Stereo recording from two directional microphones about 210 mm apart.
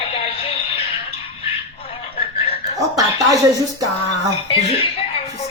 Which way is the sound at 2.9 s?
15° right (ahead or behind).